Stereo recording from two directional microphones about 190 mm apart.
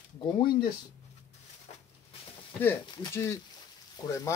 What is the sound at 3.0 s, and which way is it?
Speech, 15° left (ahead or behind).